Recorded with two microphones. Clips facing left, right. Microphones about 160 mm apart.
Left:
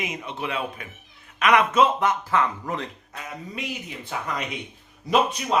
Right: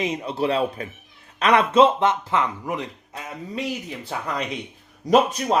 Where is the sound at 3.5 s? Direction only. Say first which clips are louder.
Right 7 dB; 35° right (ahead or behind).